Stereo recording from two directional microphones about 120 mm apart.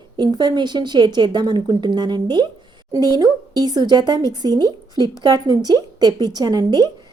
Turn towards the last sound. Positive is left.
turn(degrees=-35)  # may be behind; listen again after turning